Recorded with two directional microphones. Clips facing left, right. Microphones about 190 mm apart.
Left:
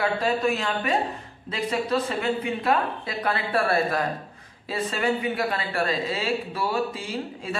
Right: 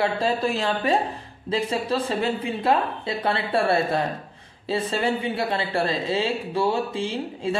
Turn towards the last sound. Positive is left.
turn(degrees=-30)  # may be behind; listen again after turning